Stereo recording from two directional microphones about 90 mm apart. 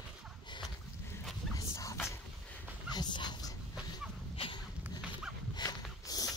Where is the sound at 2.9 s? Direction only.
55° left (ahead or behind).